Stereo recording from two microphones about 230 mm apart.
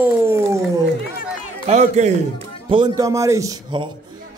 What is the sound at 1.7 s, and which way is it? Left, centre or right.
Speech, right.